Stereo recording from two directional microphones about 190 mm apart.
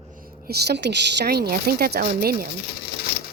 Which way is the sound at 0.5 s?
60° right (ahead or behind).